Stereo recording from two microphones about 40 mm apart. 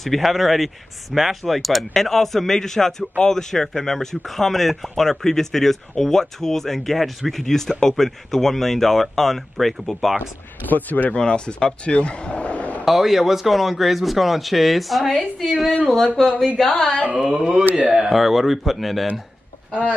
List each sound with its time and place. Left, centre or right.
0.0 s a man's voice: centre
10.6 s speech: left
11.1 s speech: left
12.8 s a man's voice: centre
16.5 s speech: centre
17.1 s speech: centre
18.1 s a man's voice: centre